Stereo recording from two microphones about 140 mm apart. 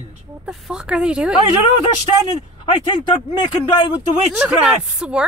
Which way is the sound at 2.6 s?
35° left (ahead or behind).